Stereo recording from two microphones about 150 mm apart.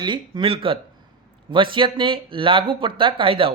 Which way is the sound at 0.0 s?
30° right (ahead or behind).